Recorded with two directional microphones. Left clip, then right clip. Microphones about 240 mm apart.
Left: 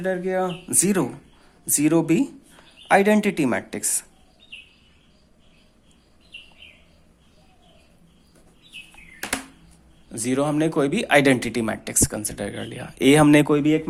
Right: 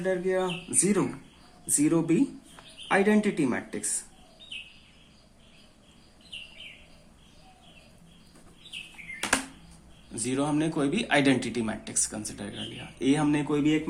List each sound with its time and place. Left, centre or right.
0.0 s speech: left
10.1 s speech: left